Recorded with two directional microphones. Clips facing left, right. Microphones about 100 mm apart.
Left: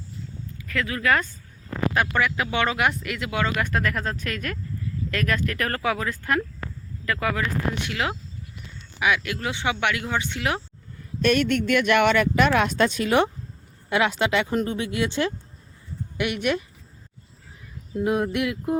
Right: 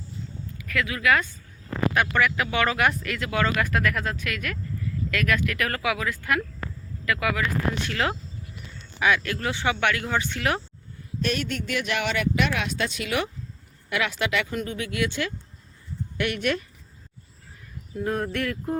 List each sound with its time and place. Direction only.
0.6 s speech: 30° left (ahead or behind)
3.7 s speech: 25° left (ahead or behind)
7.8 s speech: 15° left (ahead or behind)
11.2 s speech: 60° left (ahead or behind); by 15.3 s 25° left (ahead or behind)
16.1 s speech: 15° left (ahead or behind)
18.0 s speech: 10° left (ahead or behind)